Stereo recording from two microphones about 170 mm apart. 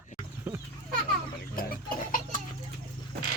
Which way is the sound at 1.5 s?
60° left (ahead or behind).